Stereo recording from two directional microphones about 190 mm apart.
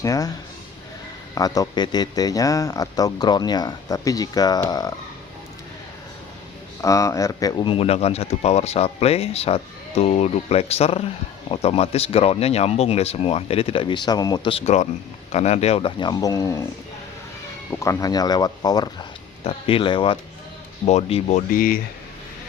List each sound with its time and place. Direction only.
0.0 s speech: 20° left (ahead or behind)
1.4 s speech: 20° left (ahead or behind)
6.8 s speech: 15° left (ahead or behind)
17.7 s speech: 15° left (ahead or behind); by 21.8 s 50° left (ahead or behind)